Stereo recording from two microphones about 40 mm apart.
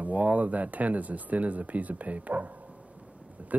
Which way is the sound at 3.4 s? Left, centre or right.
Right.